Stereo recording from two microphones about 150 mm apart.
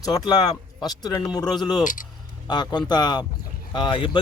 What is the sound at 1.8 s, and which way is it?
Speech, 60° left (ahead or behind).